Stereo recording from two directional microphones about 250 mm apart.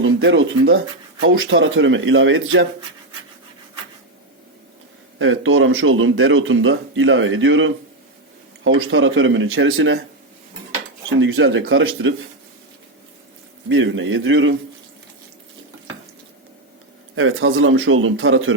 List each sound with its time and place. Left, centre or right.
0.0 s speech: right
5.2 s speech: right
11.2 s speech: right
13.7 s speech: right
17.2 s speech: right